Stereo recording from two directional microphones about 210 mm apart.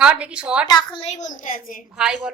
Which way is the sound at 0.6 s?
20° left (ahead or behind).